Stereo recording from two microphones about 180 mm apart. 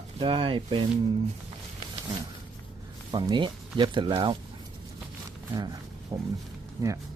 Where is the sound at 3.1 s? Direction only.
25° right (ahead or behind).